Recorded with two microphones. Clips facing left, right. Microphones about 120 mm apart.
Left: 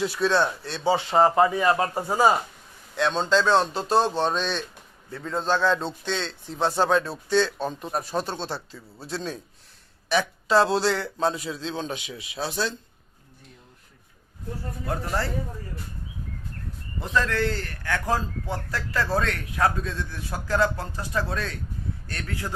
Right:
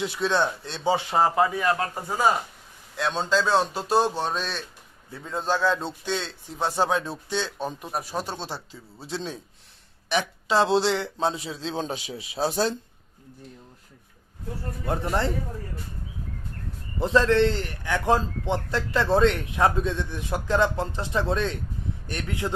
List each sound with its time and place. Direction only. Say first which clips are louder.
0.0 s a man's voice: left 2 dB; 20° right (ahead or behind)
2.9 s a man's voice: left 2 dB; 5° right (ahead or behind); by 12.7 s 40° right (ahead or behind)
14.8 s a man's voice: right 3 dB; 20° right (ahead or behind)
17.0 s a man's voice: right 5 dB; 30° right (ahead or behind)